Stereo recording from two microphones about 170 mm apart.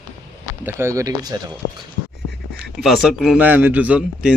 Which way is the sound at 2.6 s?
Centre (ahead or behind).